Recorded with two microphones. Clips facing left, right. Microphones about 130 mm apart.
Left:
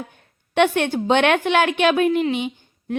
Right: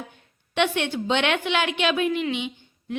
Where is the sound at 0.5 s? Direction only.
50° left (ahead or behind).